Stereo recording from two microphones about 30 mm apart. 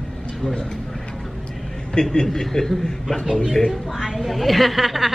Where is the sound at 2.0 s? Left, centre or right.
Left.